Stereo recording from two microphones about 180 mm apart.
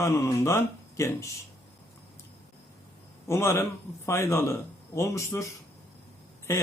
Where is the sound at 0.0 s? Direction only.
15° left (ahead or behind).